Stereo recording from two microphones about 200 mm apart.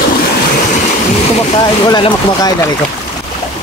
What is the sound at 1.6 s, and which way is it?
Speech, 20° left (ahead or behind).